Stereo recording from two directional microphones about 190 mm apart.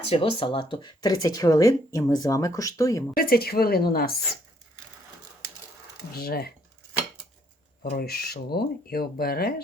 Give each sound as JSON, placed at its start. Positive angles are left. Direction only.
{"t": 0.1, "sound": "speech", "side_deg": 30}
{"t": 3.2, "sound": "speech", "side_deg": 50}
{"t": 6.1, "sound": "speech", "side_deg": 55}
{"t": 7.9, "sound": "speech", "side_deg": 55}